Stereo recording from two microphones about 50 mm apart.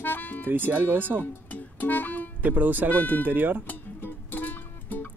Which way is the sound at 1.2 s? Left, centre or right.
Left.